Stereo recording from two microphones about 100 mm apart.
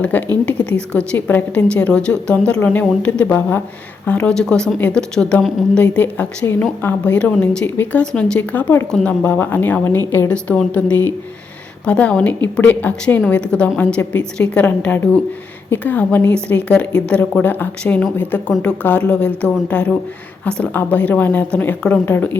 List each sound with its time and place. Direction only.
0.0 s a woman's voice: 15° left (ahead or behind)